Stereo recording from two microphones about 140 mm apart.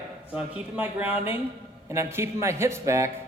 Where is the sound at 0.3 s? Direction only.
10° right (ahead or behind).